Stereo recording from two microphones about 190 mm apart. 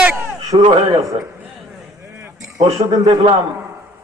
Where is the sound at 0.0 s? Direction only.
10° right (ahead or behind).